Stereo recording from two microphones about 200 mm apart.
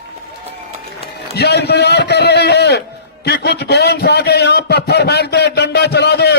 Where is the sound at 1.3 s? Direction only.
55° left (ahead or behind).